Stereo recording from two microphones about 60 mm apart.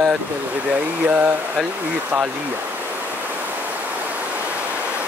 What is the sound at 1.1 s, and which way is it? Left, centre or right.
Speech, right.